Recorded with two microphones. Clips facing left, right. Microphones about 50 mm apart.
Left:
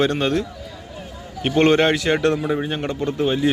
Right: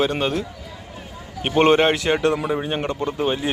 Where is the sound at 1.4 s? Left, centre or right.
Right.